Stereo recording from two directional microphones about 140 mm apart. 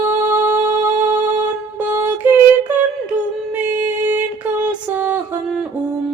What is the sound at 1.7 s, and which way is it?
Female singing, 15° right (ahead or behind).